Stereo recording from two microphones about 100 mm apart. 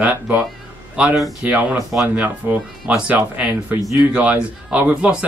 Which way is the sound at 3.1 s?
15° right (ahead or behind).